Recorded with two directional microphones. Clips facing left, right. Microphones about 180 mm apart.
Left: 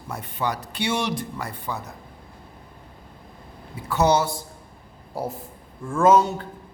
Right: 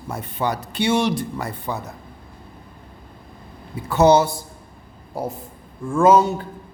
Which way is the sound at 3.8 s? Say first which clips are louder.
Right 5 dB; 25° right (ahead or behind).